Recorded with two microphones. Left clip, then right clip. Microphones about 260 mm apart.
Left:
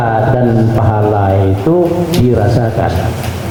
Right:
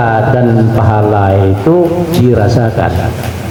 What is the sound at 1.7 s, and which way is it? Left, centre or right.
Speech, centre.